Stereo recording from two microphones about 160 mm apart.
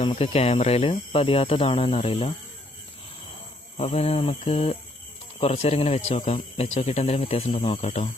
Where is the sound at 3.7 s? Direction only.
40° left (ahead or behind).